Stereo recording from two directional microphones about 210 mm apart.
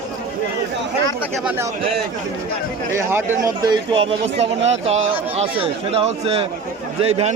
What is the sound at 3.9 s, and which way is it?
A man's voice, 25° right (ahead or behind).